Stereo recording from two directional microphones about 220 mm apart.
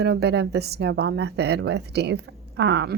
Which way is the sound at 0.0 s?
50° right (ahead or behind).